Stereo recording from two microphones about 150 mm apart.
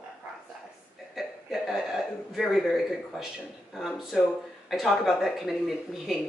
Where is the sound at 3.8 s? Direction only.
Centre (ahead or behind).